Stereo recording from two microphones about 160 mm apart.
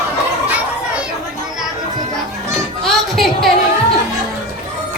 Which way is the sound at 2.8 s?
Centre (ahead or behind).